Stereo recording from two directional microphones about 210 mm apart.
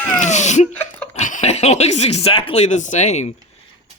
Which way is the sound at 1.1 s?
35° left (ahead or behind).